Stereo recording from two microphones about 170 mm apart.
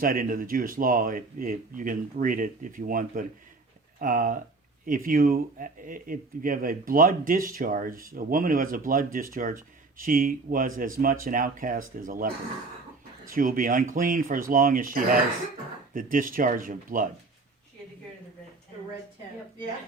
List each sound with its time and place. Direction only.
0.0 s speech: 55° right (ahead or behind)